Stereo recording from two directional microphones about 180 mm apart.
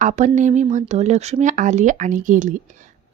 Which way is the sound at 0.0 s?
45° right (ahead or behind).